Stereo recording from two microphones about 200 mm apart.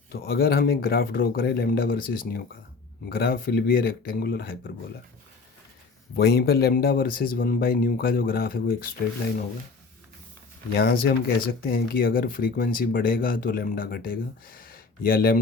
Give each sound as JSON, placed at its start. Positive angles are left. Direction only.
{"t": 0.1, "sound": "speech", "side_deg": 50}
{"t": 6.1, "sound": "speech", "side_deg": 50}
{"t": 10.8, "sound": "speech", "side_deg": 50}